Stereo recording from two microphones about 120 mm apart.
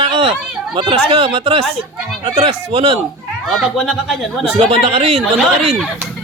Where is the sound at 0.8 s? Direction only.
50° right (ahead or behind).